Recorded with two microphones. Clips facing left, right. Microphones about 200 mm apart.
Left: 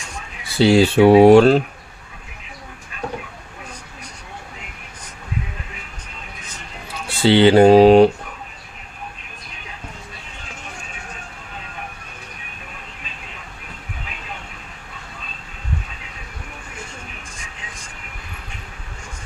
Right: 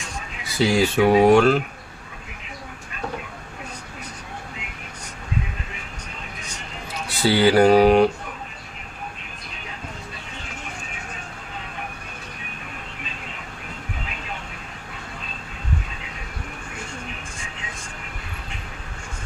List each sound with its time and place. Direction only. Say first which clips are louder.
0.4 s speech: left 6 dB; 30° left (ahead or behind)
7.1 s speech: left 5 dB; 25° left (ahead or behind)